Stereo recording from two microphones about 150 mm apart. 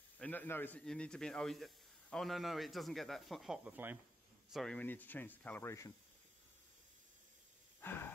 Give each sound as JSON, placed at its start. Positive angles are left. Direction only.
{"t": 0.2, "sound": "speech", "side_deg": 10}
{"t": 4.5, "sound": "speech", "side_deg": 5}
{"t": 7.8, "sound": "a sound", "side_deg": 15}